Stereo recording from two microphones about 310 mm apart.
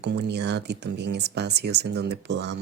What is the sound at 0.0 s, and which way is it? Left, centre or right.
Speech, right.